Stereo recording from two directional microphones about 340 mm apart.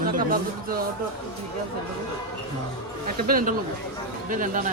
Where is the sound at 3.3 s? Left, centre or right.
Right.